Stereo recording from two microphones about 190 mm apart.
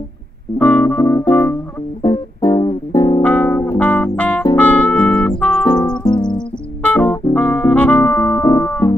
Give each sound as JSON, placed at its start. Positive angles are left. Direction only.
{"t": 0.6, "sound": "music", "side_deg": 10}
{"t": 3.2, "sound": "music", "side_deg": 10}
{"t": 6.0, "sound": "music", "side_deg": 25}
{"t": 6.3, "sound": "music", "side_deg": 5}